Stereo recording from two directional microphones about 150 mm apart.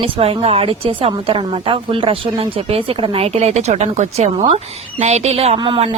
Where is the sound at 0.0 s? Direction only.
40° right (ahead or behind).